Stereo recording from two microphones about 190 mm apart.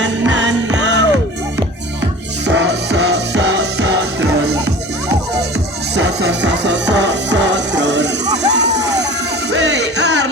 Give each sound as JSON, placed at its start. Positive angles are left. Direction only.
{"t": 0.0, "sound": "music", "side_deg": -75}
{"t": 2.5, "sound": "music", "side_deg": -70}
{"t": 5.9, "sound": "music", "side_deg": -65}
{"t": 8.4, "sound": "vehicle", "side_deg": -65}
{"t": 9.5, "sound": "music", "side_deg": -65}